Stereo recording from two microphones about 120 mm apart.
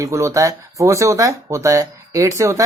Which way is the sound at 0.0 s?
25° right (ahead or behind).